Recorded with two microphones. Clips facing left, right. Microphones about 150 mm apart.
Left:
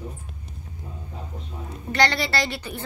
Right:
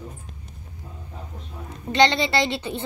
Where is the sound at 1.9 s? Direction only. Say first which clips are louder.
Right 4 dB; 20° right (ahead or behind).